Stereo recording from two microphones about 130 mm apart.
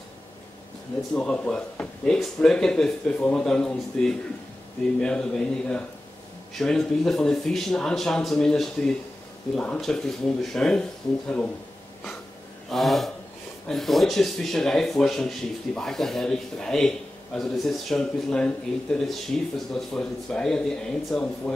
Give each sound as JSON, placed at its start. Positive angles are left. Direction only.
{"t": 1.1, "sound": "speech", "side_deg": 10}
{"t": 12.6, "sound": "speech", "side_deg": 0}